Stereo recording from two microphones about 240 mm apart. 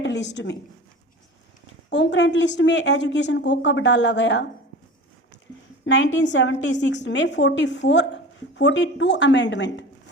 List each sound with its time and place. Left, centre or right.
0.0 s a sound: left
1.9 s a woman's voice: left
5.8 s a woman's voice: left